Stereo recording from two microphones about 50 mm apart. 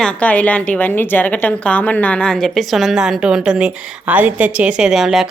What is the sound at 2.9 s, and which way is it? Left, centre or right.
Speech, centre.